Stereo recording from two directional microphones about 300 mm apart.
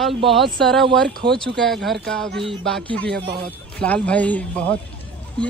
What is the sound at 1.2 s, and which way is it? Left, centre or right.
Speech, centre.